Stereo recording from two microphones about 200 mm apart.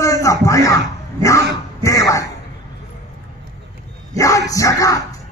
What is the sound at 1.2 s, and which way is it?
Dog, 15° left (ahead or behind).